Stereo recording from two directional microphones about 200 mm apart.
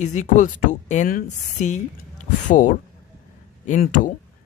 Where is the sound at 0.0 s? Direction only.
35° left (ahead or behind).